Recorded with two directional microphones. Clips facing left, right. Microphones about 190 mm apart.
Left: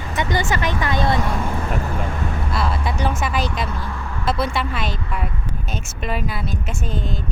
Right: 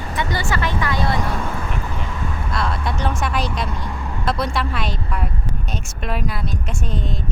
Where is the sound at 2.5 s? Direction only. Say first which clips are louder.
Even; 5° left (ahead or behind).